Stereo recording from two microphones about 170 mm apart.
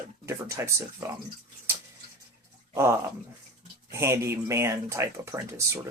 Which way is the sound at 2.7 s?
15° right (ahead or behind).